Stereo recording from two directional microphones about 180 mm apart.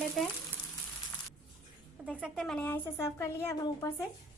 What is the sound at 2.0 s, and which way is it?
A woman's voice, 5° right (ahead or behind).